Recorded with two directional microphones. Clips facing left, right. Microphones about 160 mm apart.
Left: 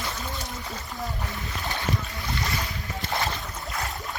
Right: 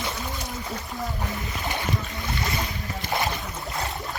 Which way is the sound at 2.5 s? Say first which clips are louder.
Right 2 dB; 20° right (ahead or behind).